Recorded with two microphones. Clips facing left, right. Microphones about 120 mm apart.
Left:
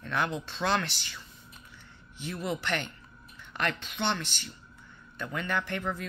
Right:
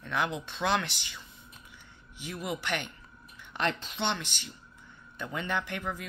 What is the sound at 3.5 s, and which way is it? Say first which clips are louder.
Speech: right 1 dB; 25° right (ahead or behind).